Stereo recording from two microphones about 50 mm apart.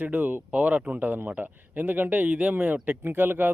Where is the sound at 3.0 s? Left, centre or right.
Right.